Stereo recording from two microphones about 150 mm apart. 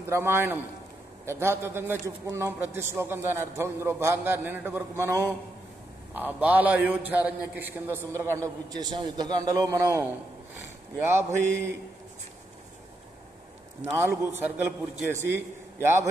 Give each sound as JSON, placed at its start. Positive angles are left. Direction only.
{"t": 0.0, "sound": "a man's voice", "side_deg": -15}
{"t": 11.1, "sound": "a man's voice", "side_deg": -20}
{"t": 13.9, "sound": "a man's voice", "side_deg": -15}